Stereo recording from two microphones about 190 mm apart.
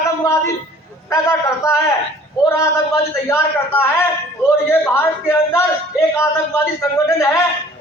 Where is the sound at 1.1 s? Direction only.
15° left (ahead or behind).